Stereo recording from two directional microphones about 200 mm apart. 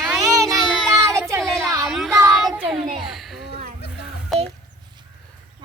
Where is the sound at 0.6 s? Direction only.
Centre (ahead or behind).